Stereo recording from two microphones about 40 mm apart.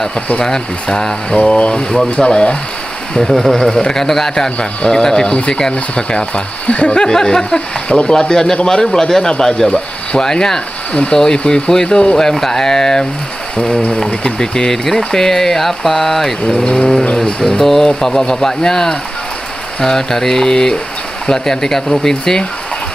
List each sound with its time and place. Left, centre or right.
0.4 s speech: centre
1.4 s speech: left
3.2 s speech: centre
4.6 s speech: centre
5.7 s speech: left
7.0 s speech: centre
7.9 s speech: left
9.0 s speech: centre
10.9 s speech: left; by 13.0 s centre
14.2 s speech: centre